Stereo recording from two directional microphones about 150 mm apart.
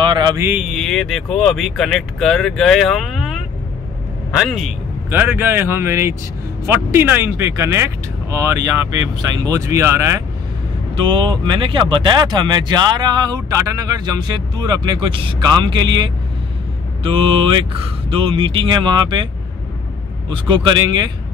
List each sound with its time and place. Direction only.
0.0 s a sound: 30° right (ahead or behind)
0.4 s speech: 15° right (ahead or behind)
0.7 s speech: 5° left (ahead or behind)
4.4 s speech: centre (ahead or behind)
5.1 s speech: 10° right (ahead or behind)
11.0 s speech: 35° right (ahead or behind)
20.2 s speech: 30° right (ahead or behind)